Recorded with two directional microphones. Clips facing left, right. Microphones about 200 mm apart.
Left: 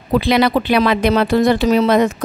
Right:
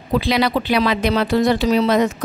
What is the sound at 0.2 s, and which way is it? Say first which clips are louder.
A woman's voice: left 4 dB; 55° left (ahead or behind).